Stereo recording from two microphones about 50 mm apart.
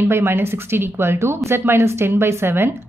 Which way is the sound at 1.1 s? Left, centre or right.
Right.